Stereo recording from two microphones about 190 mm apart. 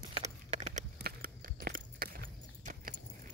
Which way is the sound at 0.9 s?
50° right (ahead or behind).